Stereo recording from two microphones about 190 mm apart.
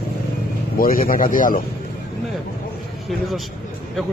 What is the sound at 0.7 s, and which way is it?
Speech, 50° left (ahead or behind).